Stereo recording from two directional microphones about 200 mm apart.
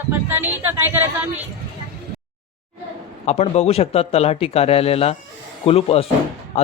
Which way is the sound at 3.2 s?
30° left (ahead or behind).